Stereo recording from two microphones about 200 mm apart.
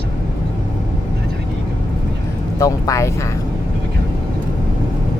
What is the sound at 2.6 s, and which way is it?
Speech, 15° left (ahead or behind).